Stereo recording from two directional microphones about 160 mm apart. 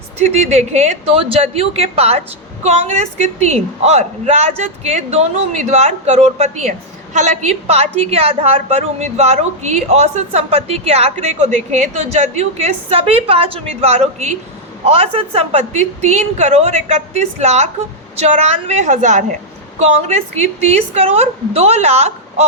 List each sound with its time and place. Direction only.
0.2 s a woman's voice: 45° right (ahead or behind)